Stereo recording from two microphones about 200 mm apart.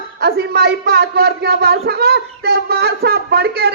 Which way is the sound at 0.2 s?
50° right (ahead or behind).